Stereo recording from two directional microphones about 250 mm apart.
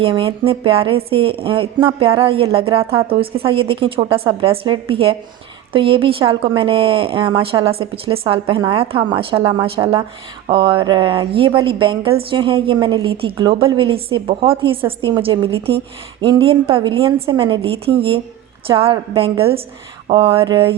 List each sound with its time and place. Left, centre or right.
0.0 s speech: right